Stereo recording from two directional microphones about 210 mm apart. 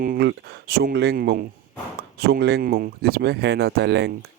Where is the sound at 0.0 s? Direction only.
50° right (ahead or behind).